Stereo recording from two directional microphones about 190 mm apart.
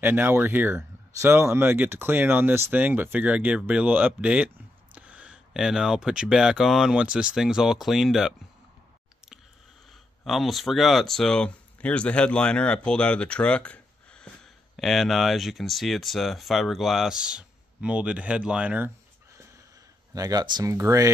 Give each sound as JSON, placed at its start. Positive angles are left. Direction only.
{"t": 0.0, "sound": "speech", "side_deg": -10}
{"t": 10.2, "sound": "speech", "side_deg": 0}
{"t": 20.2, "sound": "speech", "side_deg": -20}